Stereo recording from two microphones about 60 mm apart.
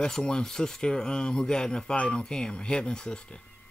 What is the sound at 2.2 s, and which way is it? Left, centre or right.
Speech, centre.